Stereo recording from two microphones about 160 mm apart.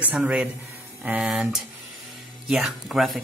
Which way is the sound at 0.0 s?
10° right (ahead or behind).